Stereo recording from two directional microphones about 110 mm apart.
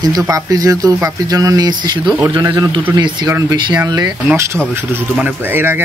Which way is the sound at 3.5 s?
45° right (ahead or behind).